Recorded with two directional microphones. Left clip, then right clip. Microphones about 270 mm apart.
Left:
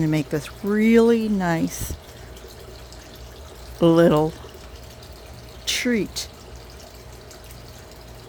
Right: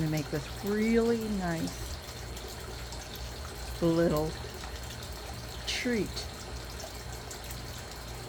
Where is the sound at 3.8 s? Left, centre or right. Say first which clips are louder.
Left 12 dB; left.